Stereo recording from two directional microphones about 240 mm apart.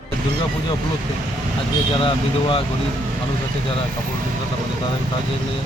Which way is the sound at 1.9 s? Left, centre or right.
Left.